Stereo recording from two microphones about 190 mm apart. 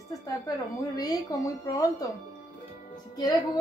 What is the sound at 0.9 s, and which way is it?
A woman's voice, 20° left (ahead or behind).